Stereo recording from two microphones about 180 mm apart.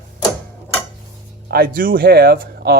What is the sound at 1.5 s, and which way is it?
Speech, 55° right (ahead or behind).